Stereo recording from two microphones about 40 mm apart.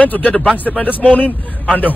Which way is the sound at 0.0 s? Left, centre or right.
Left.